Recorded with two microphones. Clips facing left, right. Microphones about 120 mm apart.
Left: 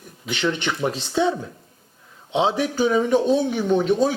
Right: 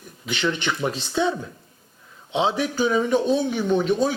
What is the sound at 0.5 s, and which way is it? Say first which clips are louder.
A man's voice: left 1 dB; 55° left (ahead or behind).